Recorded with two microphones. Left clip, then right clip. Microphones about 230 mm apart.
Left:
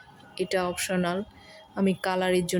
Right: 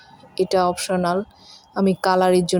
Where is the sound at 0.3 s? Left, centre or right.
Centre.